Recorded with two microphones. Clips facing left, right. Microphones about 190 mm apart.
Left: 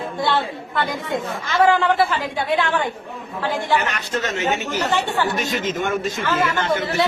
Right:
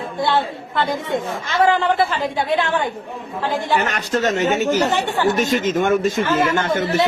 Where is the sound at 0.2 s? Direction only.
20° right (ahead or behind).